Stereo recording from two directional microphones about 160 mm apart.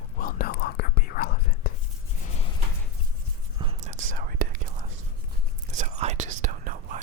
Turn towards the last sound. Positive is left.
turn(degrees=-50)  # may be behind; listen again after turning